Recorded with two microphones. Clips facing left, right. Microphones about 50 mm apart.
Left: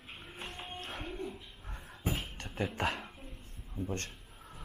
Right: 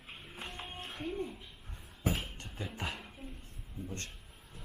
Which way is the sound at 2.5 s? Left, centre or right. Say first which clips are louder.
Left 7 dB; left.